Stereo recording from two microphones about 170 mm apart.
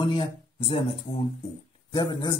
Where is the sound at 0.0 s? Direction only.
30° left (ahead or behind).